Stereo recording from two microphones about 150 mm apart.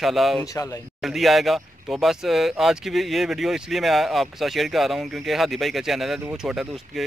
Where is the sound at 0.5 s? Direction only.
20° left (ahead or behind).